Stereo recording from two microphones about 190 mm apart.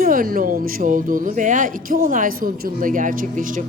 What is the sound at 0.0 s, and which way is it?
A woman's voice, 50° right (ahead or behind).